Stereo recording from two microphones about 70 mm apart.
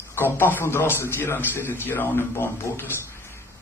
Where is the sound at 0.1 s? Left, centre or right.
Left.